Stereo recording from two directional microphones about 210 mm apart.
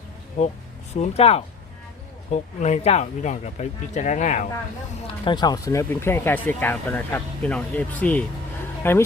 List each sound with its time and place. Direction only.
0.4 s speech: 30° left (ahead or behind)
5.0 s speech: 20° left (ahead or behind)